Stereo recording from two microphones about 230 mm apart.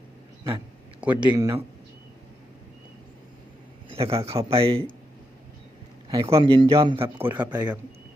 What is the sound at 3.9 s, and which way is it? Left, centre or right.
Speech, right.